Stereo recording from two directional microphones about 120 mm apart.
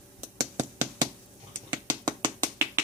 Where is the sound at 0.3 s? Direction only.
25° right (ahead or behind).